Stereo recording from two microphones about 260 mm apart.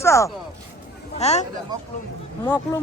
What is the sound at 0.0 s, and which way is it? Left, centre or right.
Speech, centre.